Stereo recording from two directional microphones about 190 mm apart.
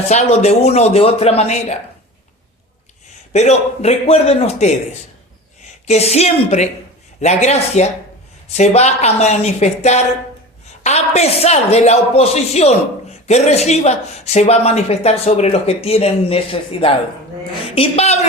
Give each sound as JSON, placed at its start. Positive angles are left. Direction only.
{"t": 0.1, "sound": "speech", "side_deg": 35}
{"t": 3.3, "sound": "speech", "side_deg": 35}